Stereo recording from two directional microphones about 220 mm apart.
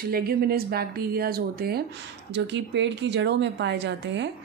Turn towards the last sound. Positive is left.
turn(degrees=-55)  # may be behind; listen again after turning